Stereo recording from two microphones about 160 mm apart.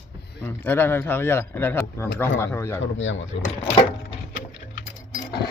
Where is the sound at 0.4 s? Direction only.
10° left (ahead or behind).